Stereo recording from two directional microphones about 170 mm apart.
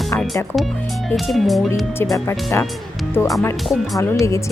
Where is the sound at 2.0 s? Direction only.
15° left (ahead or behind).